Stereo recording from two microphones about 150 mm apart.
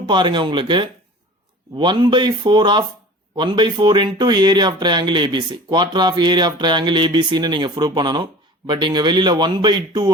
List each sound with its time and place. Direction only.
0.0 s speech: 30° right (ahead or behind)